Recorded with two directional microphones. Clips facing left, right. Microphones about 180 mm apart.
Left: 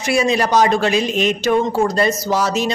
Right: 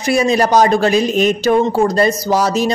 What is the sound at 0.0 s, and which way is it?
Speech, 40° right (ahead or behind).